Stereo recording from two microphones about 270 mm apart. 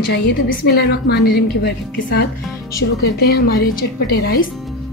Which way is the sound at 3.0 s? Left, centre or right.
Left.